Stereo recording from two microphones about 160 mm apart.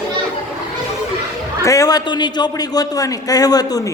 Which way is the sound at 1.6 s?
20° left (ahead or behind).